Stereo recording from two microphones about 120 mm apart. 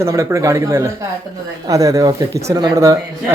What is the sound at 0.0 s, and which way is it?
Speech, 25° right (ahead or behind).